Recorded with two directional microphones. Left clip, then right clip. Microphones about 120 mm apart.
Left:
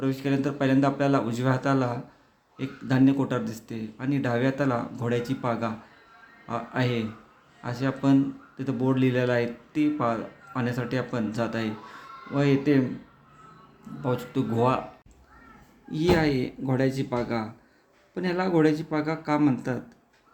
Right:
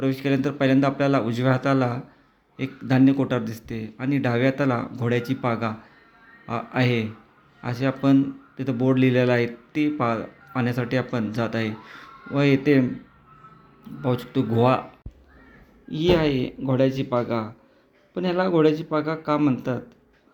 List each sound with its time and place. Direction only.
0.0 s speech: 20° right (ahead or behind)
14.0 s speech: 20° right (ahead or behind)
15.9 s speech: centre (ahead or behind)